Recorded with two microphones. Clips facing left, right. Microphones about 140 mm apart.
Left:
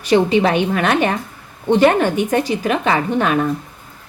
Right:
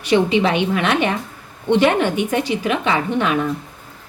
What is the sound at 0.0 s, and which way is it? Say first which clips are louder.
A woman's voice: left 2 dB; 40° left (ahead or behind).